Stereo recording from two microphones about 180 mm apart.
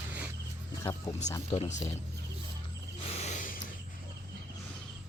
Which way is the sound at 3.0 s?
35° left (ahead or behind).